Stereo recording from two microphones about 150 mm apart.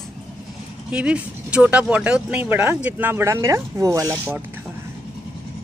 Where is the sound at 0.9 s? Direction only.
5° right (ahead or behind).